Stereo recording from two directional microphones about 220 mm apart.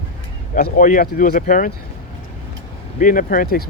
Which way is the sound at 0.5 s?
35° left (ahead or behind).